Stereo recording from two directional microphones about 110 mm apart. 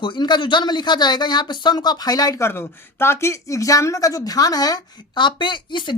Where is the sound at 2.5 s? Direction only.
20° left (ahead or behind).